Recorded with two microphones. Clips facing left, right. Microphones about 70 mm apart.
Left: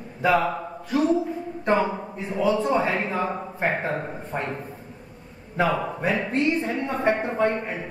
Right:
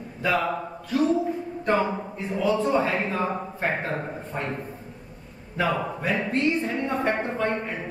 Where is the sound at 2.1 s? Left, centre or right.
Left.